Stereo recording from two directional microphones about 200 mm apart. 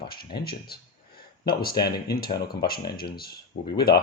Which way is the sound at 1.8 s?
50° left (ahead or behind).